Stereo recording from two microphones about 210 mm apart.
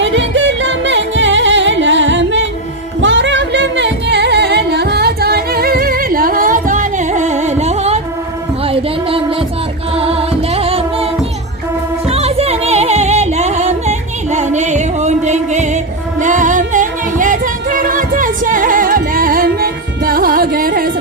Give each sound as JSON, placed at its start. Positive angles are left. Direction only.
{"t": 0.0, "sound": "music", "side_deg": -60}
{"t": 8.6, "sound": "a sound", "side_deg": -25}
{"t": 9.9, "sound": "music", "side_deg": -30}